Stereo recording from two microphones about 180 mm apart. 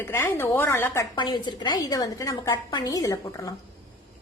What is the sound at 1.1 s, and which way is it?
A woman's voice, 25° left (ahead or behind).